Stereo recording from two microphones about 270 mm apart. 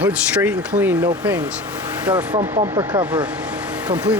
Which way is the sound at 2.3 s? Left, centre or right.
Right.